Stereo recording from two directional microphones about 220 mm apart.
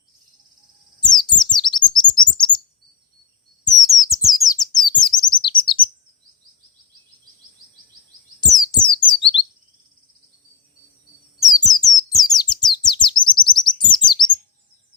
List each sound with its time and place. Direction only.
0.9 s bird: 20° left (ahead or behind)
3.6 s chirp: 15° left (ahead or behind)
8.4 s a sound: 15° left (ahead or behind)
9.0 s bird: 20° left (ahead or behind)
11.5 s bird: 15° left (ahead or behind)
13.7 s chirp: 20° left (ahead or behind)